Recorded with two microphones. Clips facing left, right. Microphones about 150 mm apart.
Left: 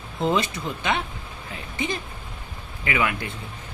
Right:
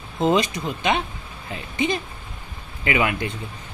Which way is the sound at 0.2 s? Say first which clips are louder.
Right 4 dB; 20° right (ahead or behind).